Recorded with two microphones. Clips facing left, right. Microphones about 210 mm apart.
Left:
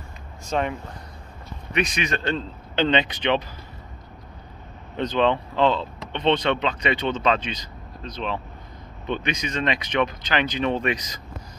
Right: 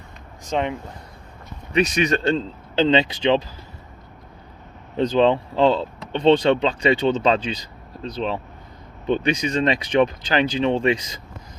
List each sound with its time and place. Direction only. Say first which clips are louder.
0.5 s speech: right 2 dB; 20° right (ahead or behind)
1.7 s speech: right 6 dB; 35° right (ahead or behind)
4.9 s speech: right 4 dB; 30° right (ahead or behind)